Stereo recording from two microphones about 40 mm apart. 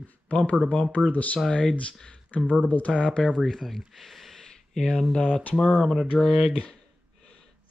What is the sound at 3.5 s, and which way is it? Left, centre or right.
Speech, centre.